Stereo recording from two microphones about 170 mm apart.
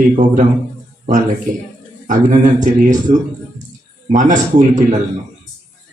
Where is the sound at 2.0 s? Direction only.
45° right (ahead or behind).